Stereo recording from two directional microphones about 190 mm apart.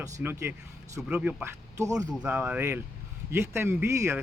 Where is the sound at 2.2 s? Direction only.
5° right (ahead or behind).